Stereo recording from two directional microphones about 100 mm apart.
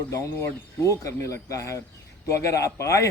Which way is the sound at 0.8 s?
30° left (ahead or behind).